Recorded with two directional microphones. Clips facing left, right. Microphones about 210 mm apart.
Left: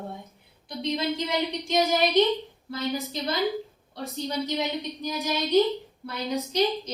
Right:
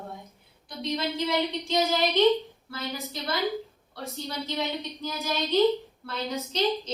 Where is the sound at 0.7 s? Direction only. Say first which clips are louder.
Left 3 dB; 15° left (ahead or behind).